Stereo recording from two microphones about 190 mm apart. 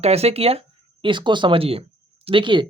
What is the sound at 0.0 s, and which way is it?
Speech, 35° right (ahead or behind).